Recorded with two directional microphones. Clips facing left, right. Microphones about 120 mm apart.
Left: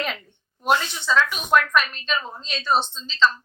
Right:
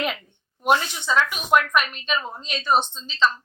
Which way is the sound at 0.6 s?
15° right (ahead or behind).